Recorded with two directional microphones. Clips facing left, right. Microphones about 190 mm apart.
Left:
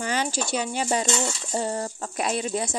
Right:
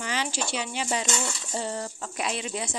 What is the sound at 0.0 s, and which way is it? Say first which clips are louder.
Speech: left 4 dB; 45° left (ahead or behind).